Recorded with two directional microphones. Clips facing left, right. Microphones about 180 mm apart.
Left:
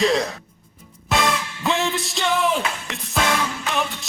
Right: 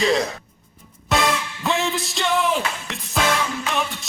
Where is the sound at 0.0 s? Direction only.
Centre (ahead or behind).